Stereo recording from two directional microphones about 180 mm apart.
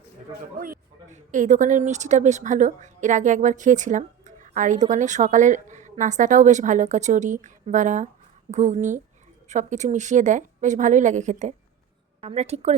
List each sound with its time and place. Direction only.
0.6 s a woman's voice: 50° right (ahead or behind)